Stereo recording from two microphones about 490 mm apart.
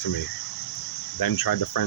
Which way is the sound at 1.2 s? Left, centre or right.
Left.